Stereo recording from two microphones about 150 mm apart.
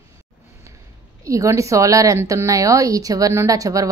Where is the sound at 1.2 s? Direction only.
20° right (ahead or behind).